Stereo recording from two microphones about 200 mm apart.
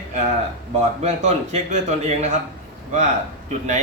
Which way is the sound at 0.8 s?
35° right (ahead or behind).